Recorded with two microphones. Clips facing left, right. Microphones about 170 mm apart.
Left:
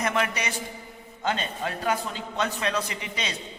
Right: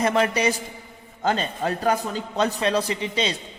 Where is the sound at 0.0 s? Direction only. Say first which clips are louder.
Right 6 dB; 35° right (ahead or behind).